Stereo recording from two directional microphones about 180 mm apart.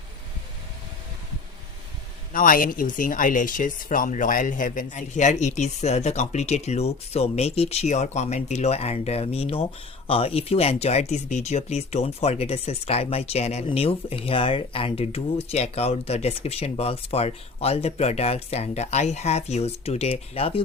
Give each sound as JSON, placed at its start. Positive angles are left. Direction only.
{"t": 2.3, "sound": "speech", "side_deg": 50}